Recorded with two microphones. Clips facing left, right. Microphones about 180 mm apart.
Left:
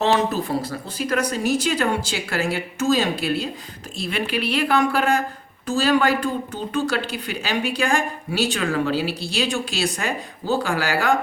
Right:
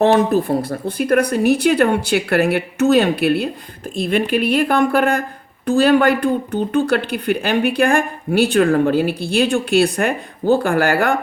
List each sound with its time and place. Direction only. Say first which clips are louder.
0.0 s speech: right 6 dB; 55° right (ahead or behind)
3.9 s speech: right 8 dB; 50° right (ahead or behind)